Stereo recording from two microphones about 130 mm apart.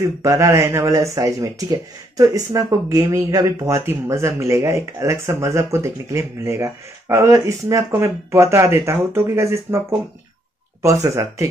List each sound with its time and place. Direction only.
0.0 s speech: 20° right (ahead or behind)